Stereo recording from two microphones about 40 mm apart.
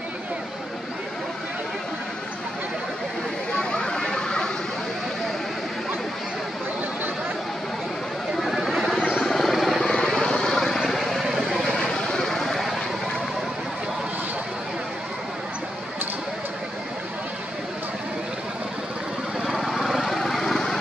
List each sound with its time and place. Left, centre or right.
3.5 s a sound: centre
8.4 s vehicle: centre
9.2 s helicopter: centre
9.8 s vehicle: centre
11.1 s vehicle: centre
11.6 s vehicle: centre
12.3 s vehicle: centre
19.4 s vehicle: centre